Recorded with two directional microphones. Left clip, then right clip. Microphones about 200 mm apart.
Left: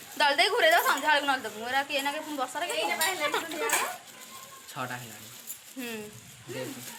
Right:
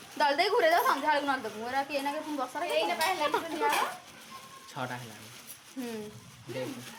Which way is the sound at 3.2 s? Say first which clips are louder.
Even; 35° right (ahead or behind).